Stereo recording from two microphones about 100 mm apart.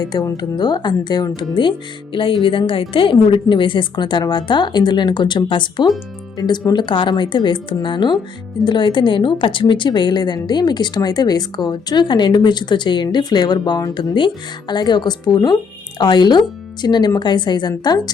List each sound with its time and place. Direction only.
0.0 s a woman's voice: 45° left (ahead or behind)